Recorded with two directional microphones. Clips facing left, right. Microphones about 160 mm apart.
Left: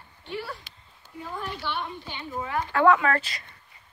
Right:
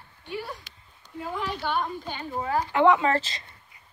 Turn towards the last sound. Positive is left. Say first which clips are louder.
# right 1 dB
turn(degrees=-25)  # may be behind; listen again after turning